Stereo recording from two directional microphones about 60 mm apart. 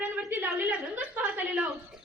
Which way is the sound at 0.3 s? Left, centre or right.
Right.